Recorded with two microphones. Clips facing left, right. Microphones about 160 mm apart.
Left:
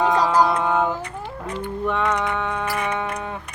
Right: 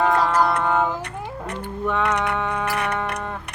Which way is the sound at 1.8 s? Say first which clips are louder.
Right 1 dB; centre (ahead or behind).